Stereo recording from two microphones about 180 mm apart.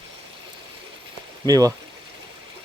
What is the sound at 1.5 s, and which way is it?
Speech, 20° right (ahead or behind).